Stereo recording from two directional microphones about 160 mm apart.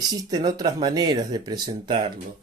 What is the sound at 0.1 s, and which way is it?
Speech, 25° right (ahead or behind).